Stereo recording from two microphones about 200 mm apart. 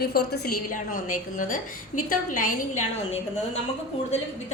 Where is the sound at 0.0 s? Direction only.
50° left (ahead or behind); by 3.6 s 35° left (ahead or behind).